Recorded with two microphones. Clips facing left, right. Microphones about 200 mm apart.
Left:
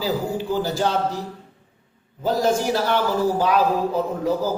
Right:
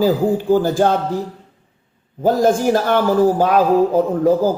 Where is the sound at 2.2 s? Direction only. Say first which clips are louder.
Right 6 dB; 50° right (ahead or behind).